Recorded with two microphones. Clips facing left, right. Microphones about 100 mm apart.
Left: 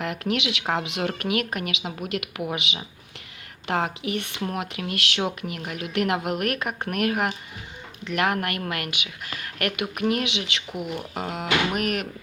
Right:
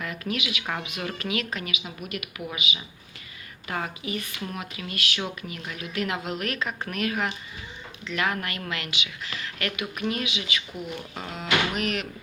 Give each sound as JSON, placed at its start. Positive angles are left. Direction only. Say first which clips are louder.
{"t": 0.0, "sound": "speech", "louder": "left 5 dB", "side_deg": 70}
{"t": 0.6, "sound": "speech", "louder": "left 6 dB", "side_deg": 65}
{"t": 2.0, "sound": "speech", "louder": "left 6 dB", "side_deg": 90}
{"t": 2.6, "sound": "speech", "louder": "even", "side_deg": 75}
{"t": 4.4, "sound": "speech", "louder": "left 5 dB", "side_deg": 60}
{"t": 10.7, "sound": "speech", "louder": "left 4 dB", "side_deg": 15}
{"t": 11.1, "sound": "speech", "louder": "left 1 dB", "side_deg": 60}